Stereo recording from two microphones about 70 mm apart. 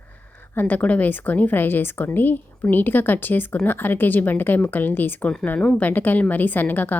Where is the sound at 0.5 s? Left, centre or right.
Left.